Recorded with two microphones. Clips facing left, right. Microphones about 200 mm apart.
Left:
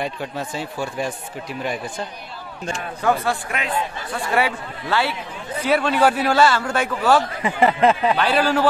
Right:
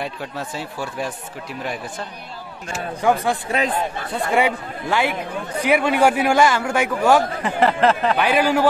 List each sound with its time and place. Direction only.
0.0 s speech: centre (ahead or behind)
2.7 s a man's voice: 10° right (ahead or behind)
3.4 s speech: 40° right (ahead or behind)
4.3 s a man's voice: 20° right (ahead or behind)
7.8 s speech: 5° left (ahead or behind)
8.2 s a man's voice: 15° right (ahead or behind)